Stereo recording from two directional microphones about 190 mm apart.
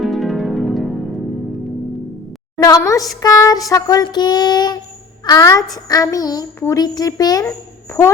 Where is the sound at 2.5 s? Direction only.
15° left (ahead or behind).